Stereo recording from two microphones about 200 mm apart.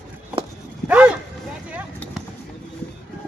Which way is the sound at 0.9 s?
5° right (ahead or behind).